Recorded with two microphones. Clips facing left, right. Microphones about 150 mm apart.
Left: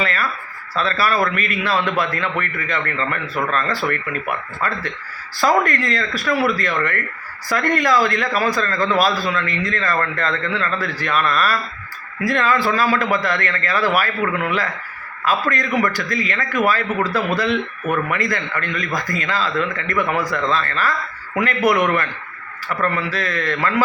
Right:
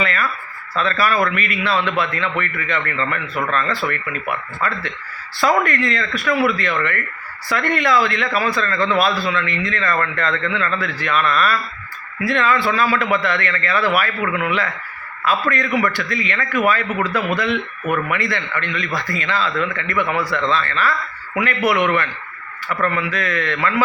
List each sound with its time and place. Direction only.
0.0 s a sound: 35° left (ahead or behind)
0.8 s speech: 30° left (ahead or behind)
5.4 s a man's voice: 40° left (ahead or behind)